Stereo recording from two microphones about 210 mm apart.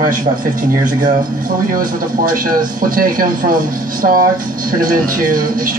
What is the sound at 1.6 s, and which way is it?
Speech, 40° right (ahead or behind).